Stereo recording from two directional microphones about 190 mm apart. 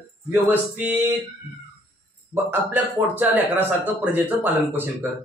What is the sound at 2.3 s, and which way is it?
Speech, 10° right (ahead or behind).